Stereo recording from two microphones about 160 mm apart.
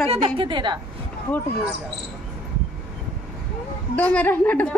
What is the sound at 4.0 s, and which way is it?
Speech, 10° left (ahead or behind).